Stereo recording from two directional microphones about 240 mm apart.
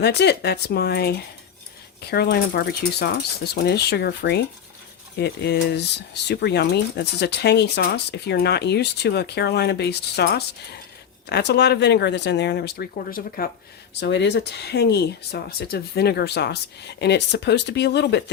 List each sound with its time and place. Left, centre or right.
0.0 s speech: left